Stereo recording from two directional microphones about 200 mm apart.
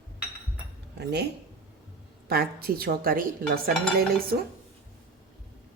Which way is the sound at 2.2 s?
50° right (ahead or behind).